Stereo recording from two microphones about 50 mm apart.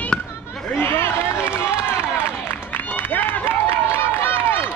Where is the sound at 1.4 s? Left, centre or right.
Right.